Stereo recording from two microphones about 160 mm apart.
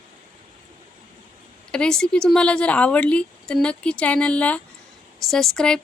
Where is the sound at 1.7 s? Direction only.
5° left (ahead or behind).